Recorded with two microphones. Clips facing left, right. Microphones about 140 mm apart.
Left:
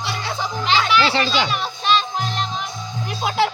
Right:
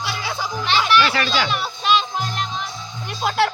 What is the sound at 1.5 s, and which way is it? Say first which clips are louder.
Music: even; 10° right (ahead or behind).